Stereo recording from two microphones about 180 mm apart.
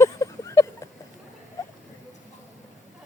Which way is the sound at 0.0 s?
15° left (ahead or behind).